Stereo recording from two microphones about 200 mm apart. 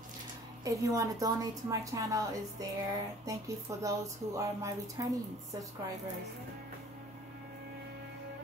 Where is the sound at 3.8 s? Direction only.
15° right (ahead or behind).